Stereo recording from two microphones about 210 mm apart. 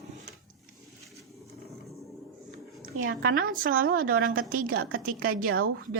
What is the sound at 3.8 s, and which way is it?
A woman's voice, 45° right (ahead or behind).